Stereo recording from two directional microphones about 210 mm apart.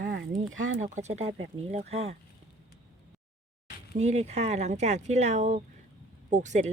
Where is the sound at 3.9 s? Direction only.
35° right (ahead or behind).